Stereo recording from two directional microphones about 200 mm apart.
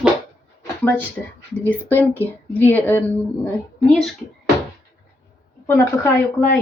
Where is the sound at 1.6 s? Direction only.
10° left (ahead or behind).